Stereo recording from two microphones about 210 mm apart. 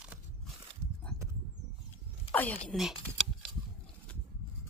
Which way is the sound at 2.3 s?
10° left (ahead or behind).